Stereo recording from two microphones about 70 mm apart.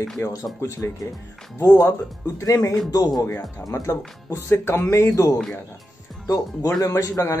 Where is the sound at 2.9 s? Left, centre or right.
Left.